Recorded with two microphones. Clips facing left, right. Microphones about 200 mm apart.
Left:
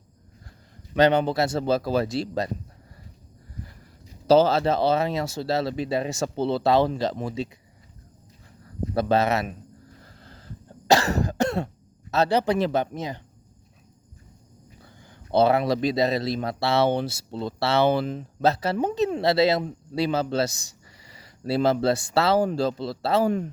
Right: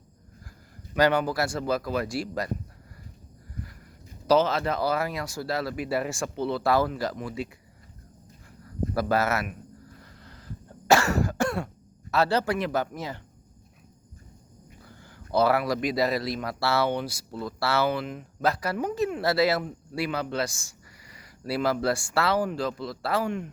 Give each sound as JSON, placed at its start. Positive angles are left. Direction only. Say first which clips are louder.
{"t": 0.9, "sound": "speech", "louder": "left 3 dB", "side_deg": 25}
{"t": 4.3, "sound": "speech", "louder": "left 4 dB", "side_deg": 30}
{"t": 9.0, "sound": "speech", "louder": "left 4 dB", "side_deg": 25}
{"t": 10.0, "sound": "a sound", "louder": "left 1 dB", "side_deg": 30}
{"t": 10.8, "sound": "cough", "louder": "left 1 dB", "side_deg": 35}
{"t": 11.2, "sound": "throat clearing", "louder": "left 2 dB", "side_deg": 20}
{"t": 12.1, "sound": "speech", "louder": "left 3 dB", "side_deg": 20}
{"t": 15.3, "sound": "speech", "louder": "left 3 dB", "side_deg": 25}